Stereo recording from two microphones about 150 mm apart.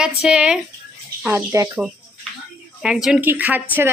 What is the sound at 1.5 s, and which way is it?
Speech, 20° right (ahead or behind).